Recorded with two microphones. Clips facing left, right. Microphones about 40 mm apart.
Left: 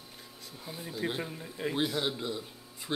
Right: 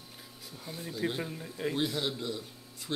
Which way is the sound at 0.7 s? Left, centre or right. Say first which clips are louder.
Right 1 dB; centre.